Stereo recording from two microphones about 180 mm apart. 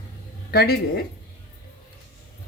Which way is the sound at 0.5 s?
60° left (ahead or behind).